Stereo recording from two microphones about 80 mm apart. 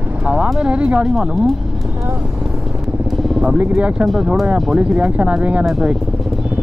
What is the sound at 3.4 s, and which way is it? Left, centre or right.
Speech, centre.